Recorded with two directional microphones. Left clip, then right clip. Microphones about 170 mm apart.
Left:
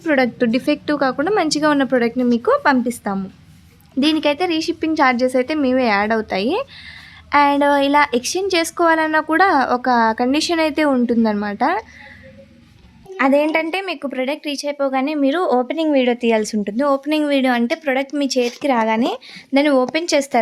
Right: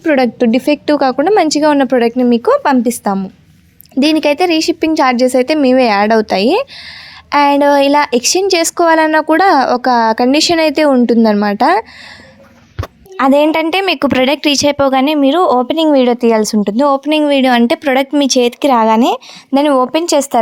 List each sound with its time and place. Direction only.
0.0 s speech: 35° right (ahead or behind)
13.1 s a woman's voice: 45° right (ahead or behind)
15.3 s speech: 35° right (ahead or behind)
19.6 s speech: 25° right (ahead or behind)